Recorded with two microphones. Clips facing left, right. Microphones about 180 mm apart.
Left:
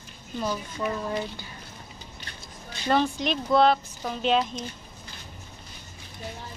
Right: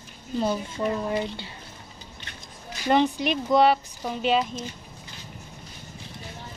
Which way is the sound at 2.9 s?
15° right (ahead or behind).